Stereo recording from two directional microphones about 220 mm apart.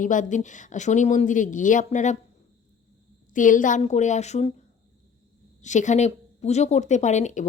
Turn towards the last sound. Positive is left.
turn(degrees=35)  # may be behind; listen again after turning